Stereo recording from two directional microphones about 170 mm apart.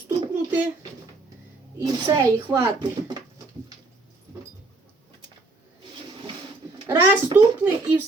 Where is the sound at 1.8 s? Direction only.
25° right (ahead or behind).